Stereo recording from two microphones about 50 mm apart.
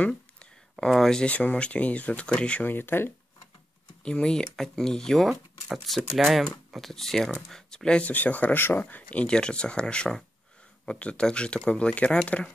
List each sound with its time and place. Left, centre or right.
0.0 s a sound: left
0.8 s speech: centre
1.2 s speech: left
2.6 s speech: left
4.0 s speech: centre
8.0 s speech: left
8.5 s speech: left
8.8 s speech: left
9.3 s speech: centre